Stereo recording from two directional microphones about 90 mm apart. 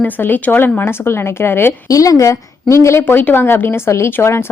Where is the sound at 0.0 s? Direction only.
20° left (ahead or behind).